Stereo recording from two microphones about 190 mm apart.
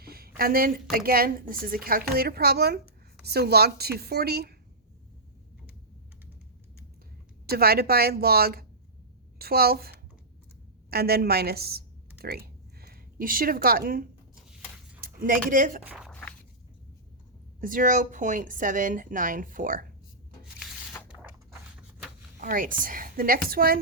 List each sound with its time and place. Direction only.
0.0 s a woman's voice: 50° right (ahead or behind)
7.4 s a woman's voice: 55° right (ahead or behind)
15.9 s a sound: 5° right (ahead or behind)
17.6 s a woman's voice: 45° right (ahead or behind)
21.1 s a sound: 5° right (ahead or behind)
22.4 s a woman's voice: 45° right (ahead or behind)